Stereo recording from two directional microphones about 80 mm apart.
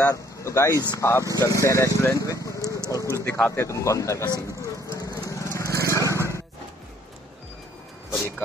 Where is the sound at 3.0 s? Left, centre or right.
Left.